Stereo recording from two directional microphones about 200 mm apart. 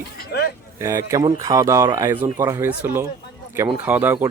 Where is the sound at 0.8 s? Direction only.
15° right (ahead or behind).